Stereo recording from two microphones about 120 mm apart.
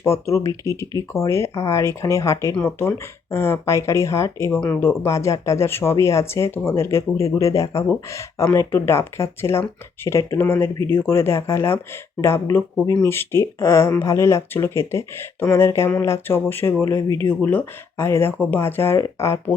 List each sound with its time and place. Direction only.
0.0 s speech: 25° left (ahead or behind)